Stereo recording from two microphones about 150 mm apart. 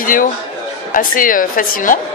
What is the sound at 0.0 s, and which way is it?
Speech, 65° left (ahead or behind).